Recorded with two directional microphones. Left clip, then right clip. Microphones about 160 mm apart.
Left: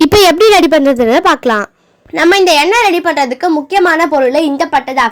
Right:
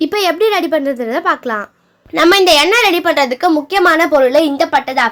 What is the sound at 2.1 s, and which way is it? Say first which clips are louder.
A woman's voice: left 1 dB; 10° left (ahead or behind).